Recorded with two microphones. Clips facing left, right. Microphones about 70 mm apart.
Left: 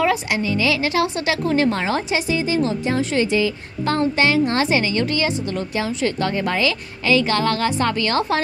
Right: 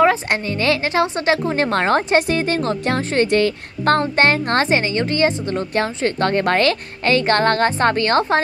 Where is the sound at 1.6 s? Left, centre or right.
Right.